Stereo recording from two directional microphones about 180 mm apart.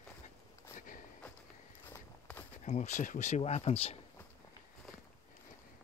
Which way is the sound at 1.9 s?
10° left (ahead or behind).